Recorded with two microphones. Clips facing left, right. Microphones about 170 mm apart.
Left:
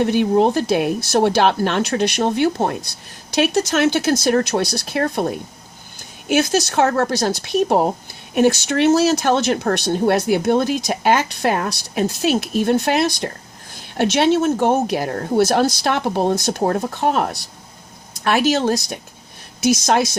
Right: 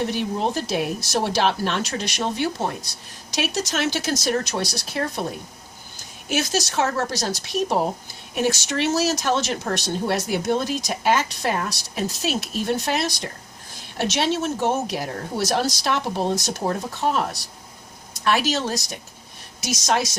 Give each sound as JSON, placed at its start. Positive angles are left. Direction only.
{"t": 0.0, "sound": "speech", "side_deg": 55}
{"t": 6.2, "sound": "speech", "side_deg": 55}